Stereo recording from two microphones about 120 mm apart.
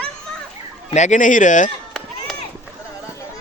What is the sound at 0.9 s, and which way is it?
Speech, 85° left.